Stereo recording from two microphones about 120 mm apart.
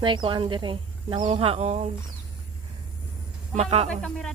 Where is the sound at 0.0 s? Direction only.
45° right (ahead or behind).